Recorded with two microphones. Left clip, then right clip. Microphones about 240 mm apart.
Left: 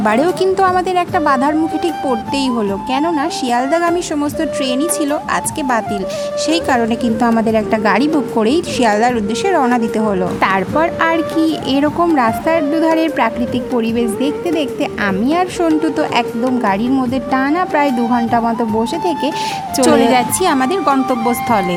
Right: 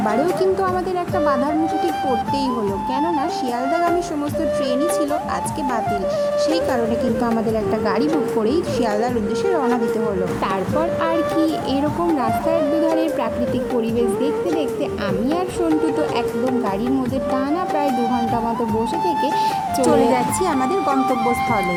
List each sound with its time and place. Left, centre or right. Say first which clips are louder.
0.0 s a woman's voice: left 5 dB; left
7.5 s a woman's voice: left 6 dB; left
11.8 s speech: left 9 dB; left
19.8 s speech: left 6 dB; left